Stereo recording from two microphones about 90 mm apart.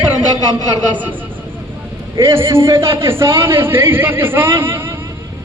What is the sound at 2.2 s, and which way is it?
A man's voice, 30° right (ahead or behind).